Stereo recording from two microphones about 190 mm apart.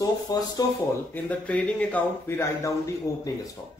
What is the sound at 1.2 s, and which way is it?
A man's voice, 10° left (ahead or behind).